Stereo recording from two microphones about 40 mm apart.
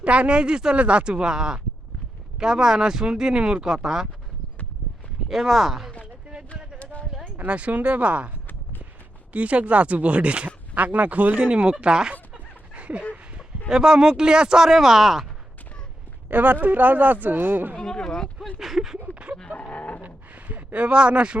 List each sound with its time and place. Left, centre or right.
0.0 s speech: right
3.6 s speech: centre
5.3 s speech: centre
7.4 s speech: right
12.7 s dog: right
13.7 s speech: centre
16.3 s speech: right
17.8 s speech: centre
18.6 s speech: centre
19.4 s livestock: left
20.0 s a sound: right
20.7 s speech: right